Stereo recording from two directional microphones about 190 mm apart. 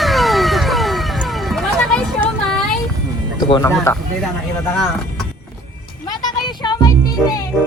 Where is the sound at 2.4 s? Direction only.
5° left (ahead or behind).